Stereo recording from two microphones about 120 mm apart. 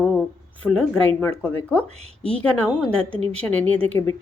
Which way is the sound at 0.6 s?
10° left (ahead or behind).